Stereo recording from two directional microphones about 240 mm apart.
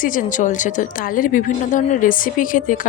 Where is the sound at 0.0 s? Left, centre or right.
Left.